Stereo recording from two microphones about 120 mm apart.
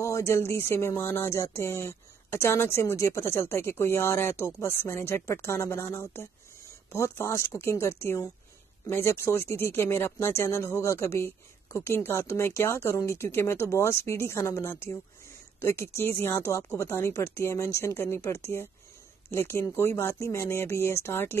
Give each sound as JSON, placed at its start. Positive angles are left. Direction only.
{"t": 0.0, "sound": "speech", "side_deg": 25}